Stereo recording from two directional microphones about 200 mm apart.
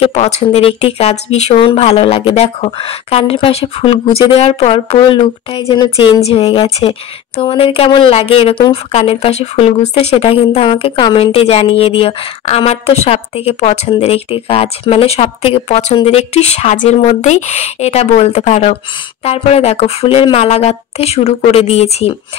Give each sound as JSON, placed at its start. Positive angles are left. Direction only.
{"t": 0.0, "sound": "a woman's voice", "side_deg": 30}